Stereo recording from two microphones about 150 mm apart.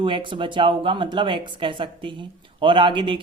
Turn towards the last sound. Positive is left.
turn(degrees=-35)  # may be behind; listen again after turning